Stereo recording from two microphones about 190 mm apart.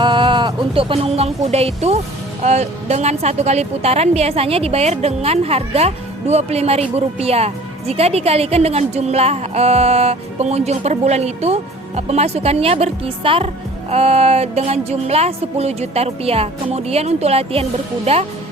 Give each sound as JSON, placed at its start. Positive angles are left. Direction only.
{"t": 0.0, "sound": "a woman's voice", "side_deg": -25}